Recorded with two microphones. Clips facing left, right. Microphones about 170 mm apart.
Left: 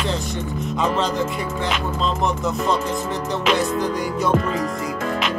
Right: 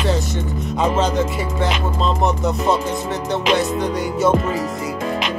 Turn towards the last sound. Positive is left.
turn(degrees=0)  # may be behind; listen again after turning